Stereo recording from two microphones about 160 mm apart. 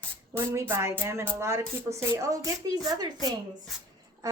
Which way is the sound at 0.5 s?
15° right (ahead or behind).